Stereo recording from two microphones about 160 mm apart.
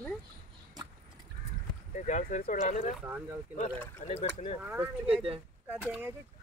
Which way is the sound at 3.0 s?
10° right (ahead or behind).